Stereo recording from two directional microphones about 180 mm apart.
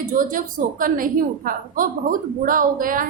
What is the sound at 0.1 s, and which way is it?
A woman's voice, 50° right (ahead or behind).